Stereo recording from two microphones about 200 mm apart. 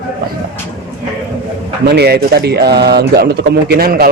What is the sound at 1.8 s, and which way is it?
Speech, 55° right (ahead or behind).